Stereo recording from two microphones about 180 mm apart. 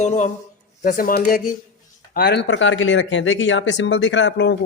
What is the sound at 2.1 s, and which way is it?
Speech, 70° left (ahead or behind).